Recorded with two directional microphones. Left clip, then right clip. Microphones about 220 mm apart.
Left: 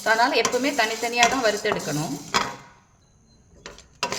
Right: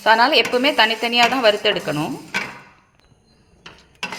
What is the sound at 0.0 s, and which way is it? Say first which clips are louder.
A woman's voice: right 6 dB; 10° right (ahead or behind).